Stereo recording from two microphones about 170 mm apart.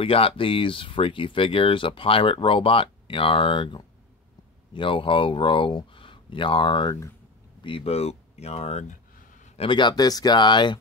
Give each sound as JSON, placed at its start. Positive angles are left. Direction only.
{"t": 0.0, "sound": "speech", "side_deg": 30}